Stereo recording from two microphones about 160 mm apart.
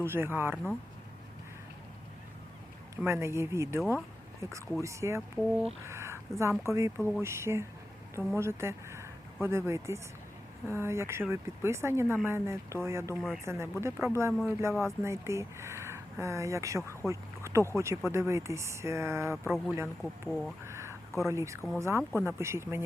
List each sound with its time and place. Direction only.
0.0 s speech: 15° right (ahead or behind)
2.9 s speech: 15° right (ahead or behind)
5.9 s a sound: 15° right (ahead or behind)
6.6 s speech: 15° right (ahead or behind)
19.5 s speech: centre (ahead or behind)
20.7 s a sound: 15° right (ahead or behind)
21.2 s speech: 20° right (ahead or behind)